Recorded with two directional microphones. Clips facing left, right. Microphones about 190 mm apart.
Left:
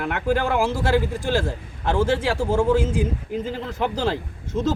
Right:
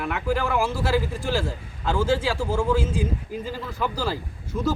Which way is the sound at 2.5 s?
20° left (ahead or behind).